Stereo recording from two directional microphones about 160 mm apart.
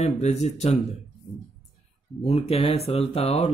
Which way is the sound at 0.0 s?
45° left (ahead or behind).